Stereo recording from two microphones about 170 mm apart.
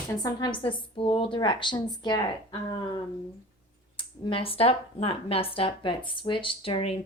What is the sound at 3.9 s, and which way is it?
A woman's voice, 30° left (ahead or behind).